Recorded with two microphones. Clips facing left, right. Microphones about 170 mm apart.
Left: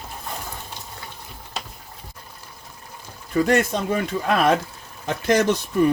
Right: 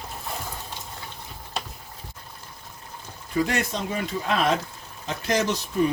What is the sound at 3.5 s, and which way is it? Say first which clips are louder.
Speech: left 7 dB; 55° left (ahead or behind).